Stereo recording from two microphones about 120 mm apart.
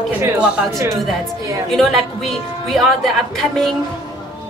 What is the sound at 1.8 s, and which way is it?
A woman's voice, centre (ahead or behind).